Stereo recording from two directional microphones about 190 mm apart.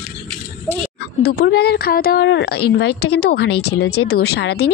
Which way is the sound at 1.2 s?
60° left (ahead or behind).